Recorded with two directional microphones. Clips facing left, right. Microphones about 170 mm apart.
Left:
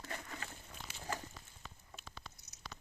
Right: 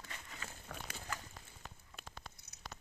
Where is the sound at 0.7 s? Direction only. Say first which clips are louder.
Right 4 dB; 75° right (ahead or behind).